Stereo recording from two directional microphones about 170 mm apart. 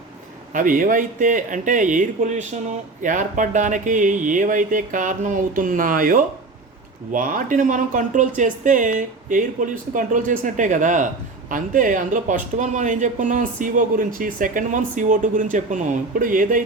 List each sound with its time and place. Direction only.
0.5 s speech: 50° right (ahead or behind)